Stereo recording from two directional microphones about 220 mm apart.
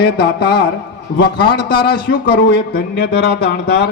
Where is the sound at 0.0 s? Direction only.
45° left (ahead or behind).